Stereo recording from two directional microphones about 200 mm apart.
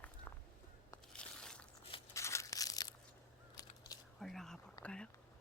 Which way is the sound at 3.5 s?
20° left (ahead or behind).